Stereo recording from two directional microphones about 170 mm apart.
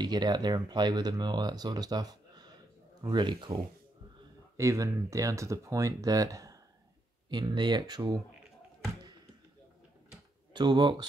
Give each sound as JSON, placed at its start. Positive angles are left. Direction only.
{"t": 0.0, "sound": "speech", "side_deg": -25}
{"t": 4.6, "sound": "speech", "side_deg": -20}
{"t": 10.5, "sound": "speech", "side_deg": -25}